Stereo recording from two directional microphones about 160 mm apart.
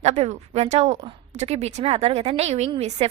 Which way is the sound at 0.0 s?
45° right (ahead or behind).